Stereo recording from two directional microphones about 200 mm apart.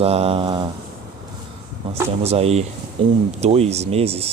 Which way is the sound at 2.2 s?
30° right (ahead or behind).